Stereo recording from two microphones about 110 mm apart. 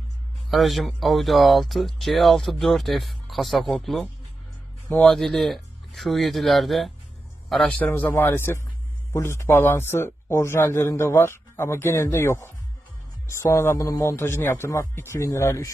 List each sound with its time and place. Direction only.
0.5 s a man's voice: centre (ahead or behind)
7.9 s a man's voice: 20° left (ahead or behind)